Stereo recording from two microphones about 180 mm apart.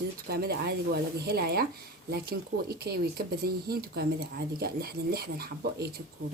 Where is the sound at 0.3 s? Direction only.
60° right (ahead or behind).